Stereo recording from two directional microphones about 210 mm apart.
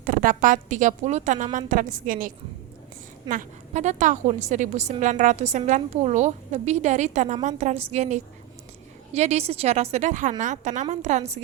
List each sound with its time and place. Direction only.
0.0 s a woman's voice: 40° right (ahead or behind)